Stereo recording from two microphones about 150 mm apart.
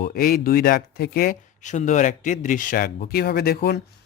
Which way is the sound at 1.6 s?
55° left (ahead or behind).